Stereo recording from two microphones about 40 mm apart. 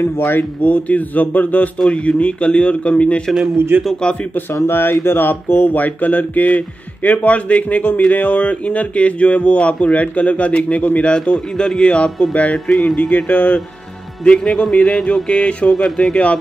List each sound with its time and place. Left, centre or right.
0.0 s speech: left
0.6 s speech: left
1.9 s speech: left
3.5 s a man's voice: right
4.6 s speech: left
11.2 s speech: left
12.6 s speech: centre
13.1 s speech: left
14.2 s speech: left